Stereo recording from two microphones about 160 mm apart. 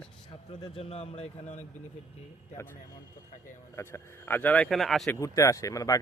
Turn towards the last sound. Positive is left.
turn(degrees=20)  # may be behind; listen again after turning